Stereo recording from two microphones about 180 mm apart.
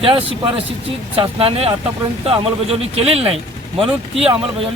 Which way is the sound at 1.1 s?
30° right (ahead or behind).